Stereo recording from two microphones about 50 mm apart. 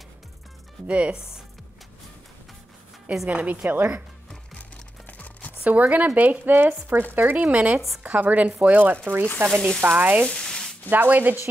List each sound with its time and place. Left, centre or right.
0.8 s speech: right
3.1 s a woman's voice: right
5.0 s music: left
5.6 s speech: right
7.4 s speech: right
8.9 s speech: right
9.8 s speech: right
10.2 s sizzle: centre
10.9 s speech: right